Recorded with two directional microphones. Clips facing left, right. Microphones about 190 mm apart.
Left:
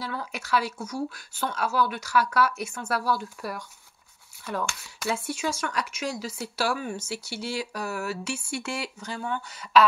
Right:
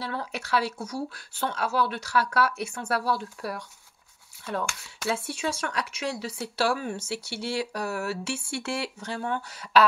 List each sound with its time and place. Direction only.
0.0 s speech: 35° right (ahead or behind)